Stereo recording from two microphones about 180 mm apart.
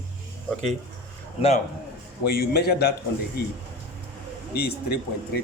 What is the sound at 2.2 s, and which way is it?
Speech, 60° left (ahead or behind).